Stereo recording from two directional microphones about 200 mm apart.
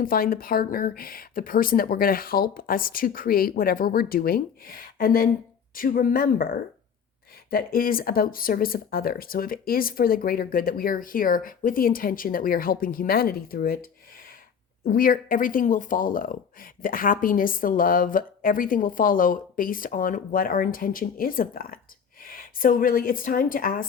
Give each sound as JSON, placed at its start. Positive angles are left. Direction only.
{"t": 0.0, "sound": "speech", "side_deg": 45}
{"t": 14.8, "sound": "speech", "side_deg": 45}